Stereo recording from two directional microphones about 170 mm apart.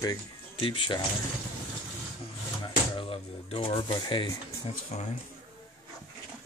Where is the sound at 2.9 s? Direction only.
30° left (ahead or behind).